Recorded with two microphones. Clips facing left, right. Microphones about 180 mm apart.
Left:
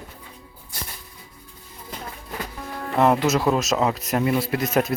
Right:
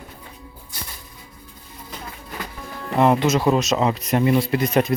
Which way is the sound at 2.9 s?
Centre (ahead or behind).